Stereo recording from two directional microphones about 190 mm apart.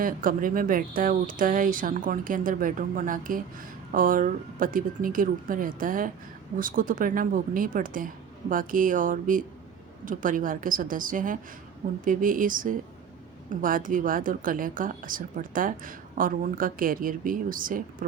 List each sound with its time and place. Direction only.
0.0 s speech: 45° right (ahead or behind)